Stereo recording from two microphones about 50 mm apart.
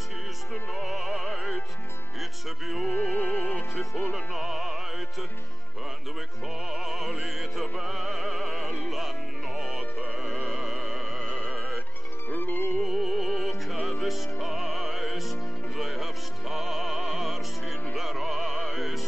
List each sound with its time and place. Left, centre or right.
0.5 s music: centre
2.9 s music: left
4.3 s music: centre
6.7 s music: centre
10.5 s music: centre
11.1 s music: centre
12.3 s music: left
12.8 s music: centre